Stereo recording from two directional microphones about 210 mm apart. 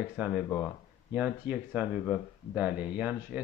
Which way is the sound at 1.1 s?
5° right (ahead or behind).